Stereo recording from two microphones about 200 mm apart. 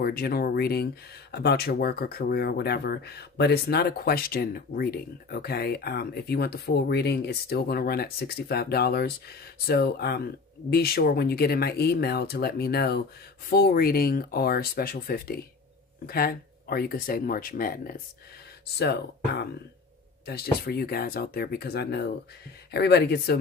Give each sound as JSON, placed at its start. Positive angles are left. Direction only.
{"t": 0.0, "sound": "speech", "side_deg": 50}